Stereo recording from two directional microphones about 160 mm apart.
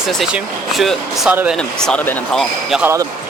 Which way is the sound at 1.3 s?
10° right (ahead or behind).